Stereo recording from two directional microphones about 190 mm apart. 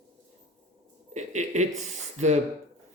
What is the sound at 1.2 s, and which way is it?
Speech, 40° right (ahead or behind).